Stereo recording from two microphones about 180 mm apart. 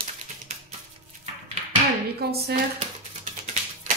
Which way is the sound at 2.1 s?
60° right (ahead or behind).